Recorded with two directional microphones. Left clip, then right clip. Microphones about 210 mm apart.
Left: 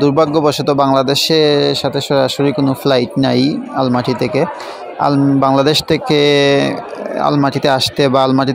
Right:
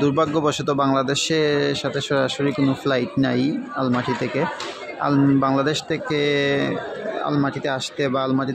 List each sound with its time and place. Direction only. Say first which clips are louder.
0.0 s speech: left 8 dB; 15° left (ahead or behind)